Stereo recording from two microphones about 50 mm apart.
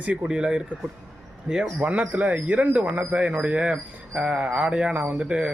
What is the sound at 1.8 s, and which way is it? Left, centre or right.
Speech, right.